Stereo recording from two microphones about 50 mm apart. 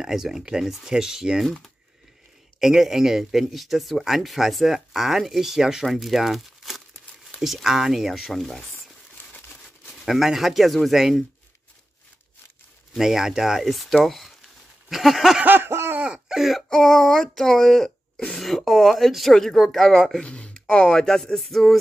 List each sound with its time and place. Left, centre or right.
0.0 s speech: centre
1.4 s speech: centre
2.6 s speech: centre
10.0 s speech: centre
12.9 s speech: centre
14.0 s a sound: centre
15.4 s a sound: right
15.7 s a sound: right
16.0 s throat clearing: centre
16.3 s speech: centre
16.6 s speech: centre
20.2 s speech: left; by 21.7 s centre